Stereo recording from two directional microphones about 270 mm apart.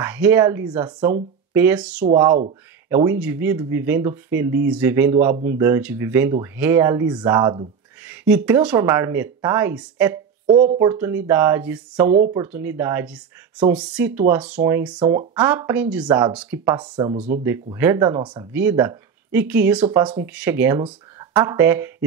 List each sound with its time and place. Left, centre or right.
0.0 s speech: centre
10.5 s speech: right; by 16.1 s centre
16.1 s speech: centre